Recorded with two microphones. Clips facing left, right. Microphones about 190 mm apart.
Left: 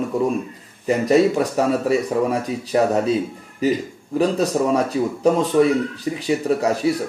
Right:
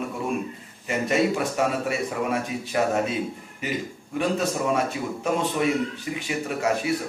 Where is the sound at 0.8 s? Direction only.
35° left (ahead or behind).